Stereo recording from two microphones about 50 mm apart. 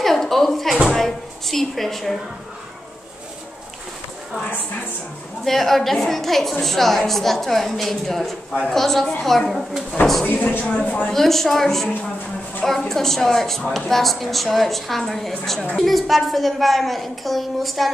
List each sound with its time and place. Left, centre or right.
0.0 s a sound: centre
0.8 s cupboard open or close: centre
5.4 s a woman's voice: centre
10.2 s speech: left
11.1 s speech: centre